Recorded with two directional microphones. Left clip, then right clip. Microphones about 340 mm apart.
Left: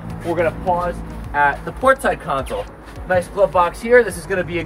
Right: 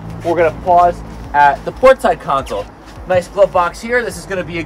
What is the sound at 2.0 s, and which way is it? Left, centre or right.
A man's voice, centre.